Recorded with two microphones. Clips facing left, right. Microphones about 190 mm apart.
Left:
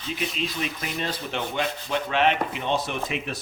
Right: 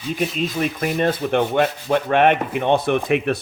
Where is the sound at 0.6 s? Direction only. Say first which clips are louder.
Right 10 dB; 50° right (ahead or behind).